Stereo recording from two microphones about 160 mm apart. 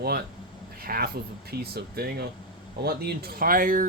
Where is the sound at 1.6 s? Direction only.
80° right.